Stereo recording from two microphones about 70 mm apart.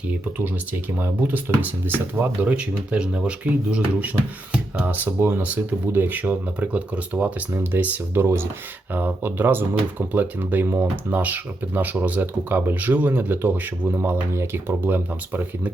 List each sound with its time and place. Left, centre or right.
0.1 s speech: right